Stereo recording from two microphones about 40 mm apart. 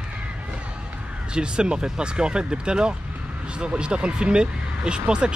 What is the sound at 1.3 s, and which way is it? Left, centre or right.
Speech, right.